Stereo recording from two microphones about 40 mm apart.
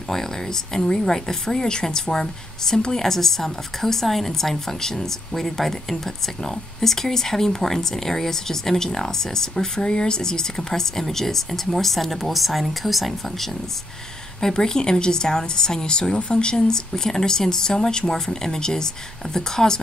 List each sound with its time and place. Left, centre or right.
0.1 s speech: centre
14.4 s speech: centre